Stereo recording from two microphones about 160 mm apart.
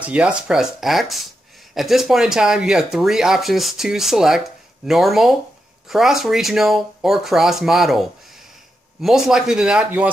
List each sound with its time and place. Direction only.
0.0 s speech: 10° right (ahead or behind)